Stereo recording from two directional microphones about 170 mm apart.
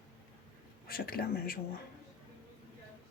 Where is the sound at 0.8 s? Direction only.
60° left (ahead or behind).